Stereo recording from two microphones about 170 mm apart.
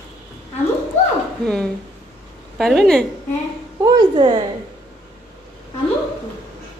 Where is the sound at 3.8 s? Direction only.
25° right (ahead or behind).